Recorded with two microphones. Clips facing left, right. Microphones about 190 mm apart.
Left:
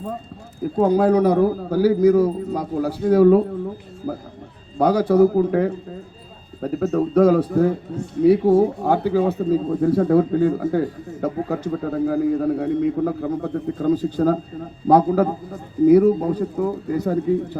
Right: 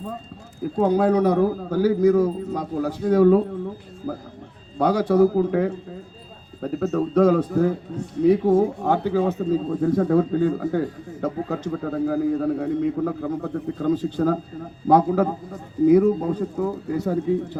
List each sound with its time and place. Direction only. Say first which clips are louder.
0.9 s speech: left 2 dB; 40° left (ahead or behind)
4.8 s speech: left 2 dB; 35° left (ahead or behind)